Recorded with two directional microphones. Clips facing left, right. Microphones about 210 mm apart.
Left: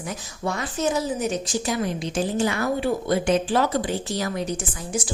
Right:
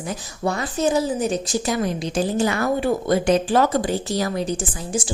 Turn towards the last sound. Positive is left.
turn(degrees=-30)  # may be behind; listen again after turning